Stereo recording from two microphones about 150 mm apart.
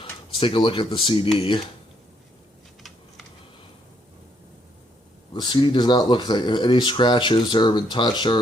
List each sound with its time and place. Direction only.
0.0 s speech: 35° left (ahead or behind)
5.3 s speech: 30° left (ahead or behind)